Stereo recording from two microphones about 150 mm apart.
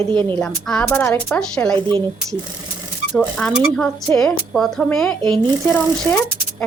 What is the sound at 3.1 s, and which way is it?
A woman's voice, 5° left (ahead or behind).